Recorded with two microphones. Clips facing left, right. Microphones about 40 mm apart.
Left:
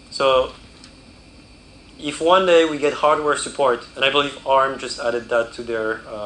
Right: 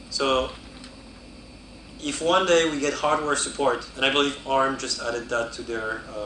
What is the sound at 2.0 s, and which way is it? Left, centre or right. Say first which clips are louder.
A man's voice: left 6 dB; left.